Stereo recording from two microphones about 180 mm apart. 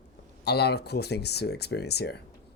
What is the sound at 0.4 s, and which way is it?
Speech, 65° left (ahead or behind).